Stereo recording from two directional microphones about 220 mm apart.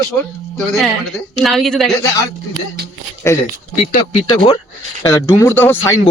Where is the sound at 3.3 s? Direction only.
10° left (ahead or behind).